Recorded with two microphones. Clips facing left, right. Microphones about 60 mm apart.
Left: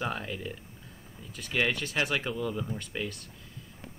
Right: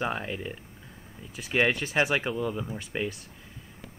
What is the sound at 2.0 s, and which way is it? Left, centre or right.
Speech, right.